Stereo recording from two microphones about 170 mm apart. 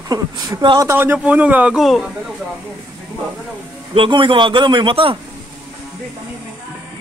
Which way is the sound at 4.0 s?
30° right (ahead or behind).